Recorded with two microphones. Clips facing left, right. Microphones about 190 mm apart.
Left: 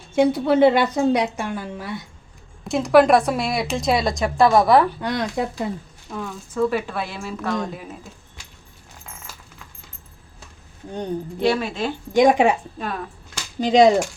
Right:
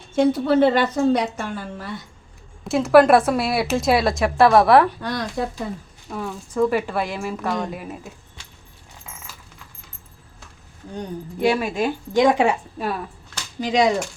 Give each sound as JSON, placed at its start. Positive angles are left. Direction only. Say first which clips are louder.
{"t": 0.2, "sound": "a woman's voice", "louder": "left 1 dB", "side_deg": 15}
{"t": 2.6, "sound": "a woman's voice", "louder": "right 1 dB", "side_deg": 0}
{"t": 4.9, "sound": "speech", "louder": "left 2 dB", "side_deg": 20}
{"t": 6.1, "sound": "a woman's voice", "louder": "right 2 dB", "side_deg": -5}
{"t": 11.3, "sound": "a woman's voice", "louder": "right 2 dB", "side_deg": -10}
{"t": 12.1, "sound": "a woman's voice", "louder": "left 2 dB", "side_deg": 15}
{"t": 13.6, "sound": "speech", "louder": "left 5 dB", "side_deg": 25}